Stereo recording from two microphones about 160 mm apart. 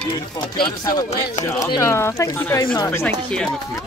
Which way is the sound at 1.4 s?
20° left (ahead or behind).